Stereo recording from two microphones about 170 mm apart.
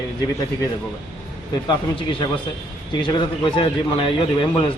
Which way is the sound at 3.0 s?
30° left (ahead or behind).